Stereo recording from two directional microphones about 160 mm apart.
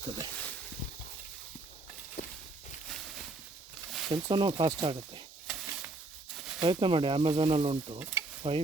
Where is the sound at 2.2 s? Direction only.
60° left (ahead or behind).